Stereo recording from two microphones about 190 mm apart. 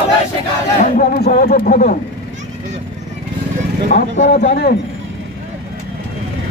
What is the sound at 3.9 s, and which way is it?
Speech, 50° left (ahead or behind).